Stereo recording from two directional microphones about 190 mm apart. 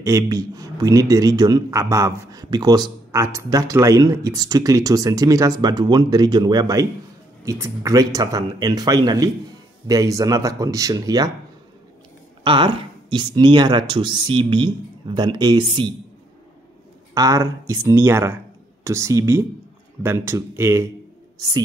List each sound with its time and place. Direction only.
0.0 s a man's voice: 15° right (ahead or behind)
12.4 s a man's voice: 25° right (ahead or behind)
17.1 s speech: 20° right (ahead or behind)